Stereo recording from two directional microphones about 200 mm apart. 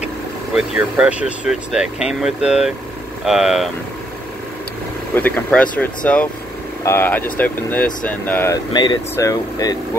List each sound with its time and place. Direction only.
0.6 s speech: 5° right (ahead or behind)
5.1 s speech: 5° left (ahead or behind)